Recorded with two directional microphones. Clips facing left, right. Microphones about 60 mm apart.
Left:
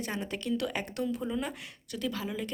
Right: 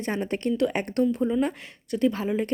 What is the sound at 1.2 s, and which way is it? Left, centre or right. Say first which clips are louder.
Speech: right 9 dB; centre.